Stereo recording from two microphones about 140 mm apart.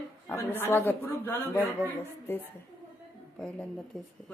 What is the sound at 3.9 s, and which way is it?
Speech, 5° left (ahead or behind).